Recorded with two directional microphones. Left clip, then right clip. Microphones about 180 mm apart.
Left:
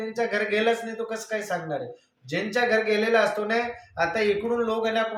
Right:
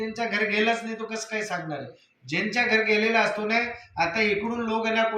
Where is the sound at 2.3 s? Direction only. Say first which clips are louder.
Even; 25° left (ahead or behind).